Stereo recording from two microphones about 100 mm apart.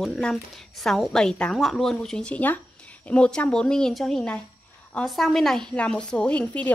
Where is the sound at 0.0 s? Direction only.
5° left (ahead or behind).